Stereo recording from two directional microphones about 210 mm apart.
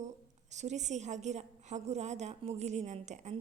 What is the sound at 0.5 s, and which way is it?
A woman's voice, 35° right (ahead or behind).